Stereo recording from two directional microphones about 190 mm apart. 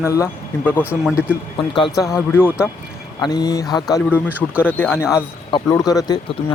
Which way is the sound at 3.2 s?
20° left (ahead or behind).